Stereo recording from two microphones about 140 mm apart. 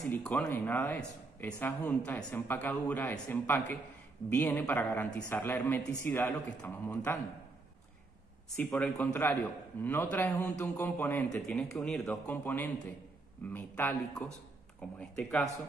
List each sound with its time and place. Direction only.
0.1 s speech: 5° left (ahead or behind)
8.5 s speech: 15° left (ahead or behind)